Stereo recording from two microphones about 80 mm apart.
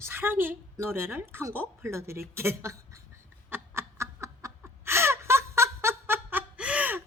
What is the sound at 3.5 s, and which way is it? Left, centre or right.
Snicker, right.